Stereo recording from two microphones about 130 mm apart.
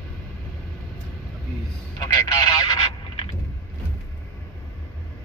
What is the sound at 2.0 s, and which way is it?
Telephone, 30° left (ahead or behind).